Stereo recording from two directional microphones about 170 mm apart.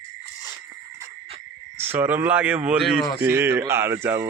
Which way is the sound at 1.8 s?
10° right (ahead or behind).